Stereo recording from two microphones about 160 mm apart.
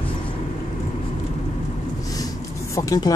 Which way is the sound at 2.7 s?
25° left (ahead or behind).